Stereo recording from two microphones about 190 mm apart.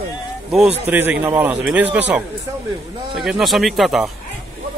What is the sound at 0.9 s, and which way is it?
A man's voice, 10° right (ahead or behind).